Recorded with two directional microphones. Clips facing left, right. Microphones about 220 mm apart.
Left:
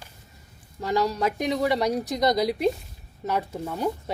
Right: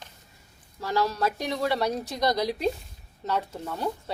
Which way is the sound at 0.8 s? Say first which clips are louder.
Left 2 dB; 15° left (ahead or behind).